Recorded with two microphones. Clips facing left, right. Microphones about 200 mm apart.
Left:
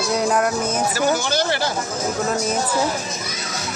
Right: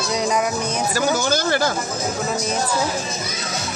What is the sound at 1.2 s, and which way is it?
Speech, 45° right (ahead or behind).